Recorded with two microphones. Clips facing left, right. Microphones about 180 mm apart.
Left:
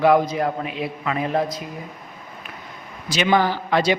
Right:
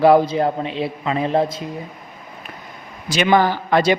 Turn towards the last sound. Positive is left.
turn(degrees=-50)  # may be behind; listen again after turning